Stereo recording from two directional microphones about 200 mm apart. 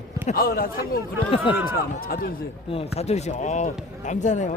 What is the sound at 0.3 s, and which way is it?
Speech, 45° left (ahead or behind).